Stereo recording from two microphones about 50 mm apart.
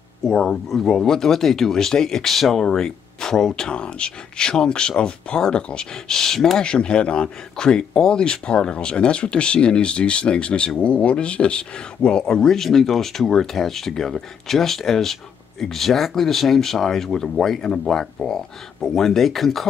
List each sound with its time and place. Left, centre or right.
0.3 s speech: centre